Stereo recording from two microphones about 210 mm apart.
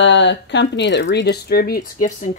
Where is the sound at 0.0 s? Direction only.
60° left (ahead or behind).